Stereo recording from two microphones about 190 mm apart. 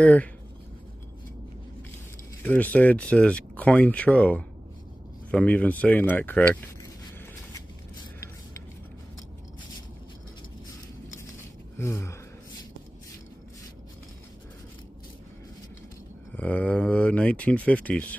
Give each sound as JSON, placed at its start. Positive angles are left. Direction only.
{"t": 0.0, "sound": "speech", "side_deg": 10}
{"t": 2.4, "sound": "speech", "side_deg": 10}
{"t": 11.8, "sound": "speech", "side_deg": 15}
{"t": 16.3, "sound": "speech", "side_deg": 5}